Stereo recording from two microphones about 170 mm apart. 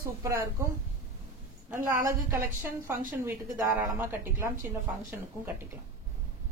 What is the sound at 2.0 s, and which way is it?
Speech, 15° right (ahead or behind).